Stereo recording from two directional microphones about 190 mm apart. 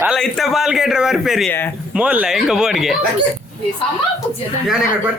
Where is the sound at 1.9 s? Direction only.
5° right (ahead or behind).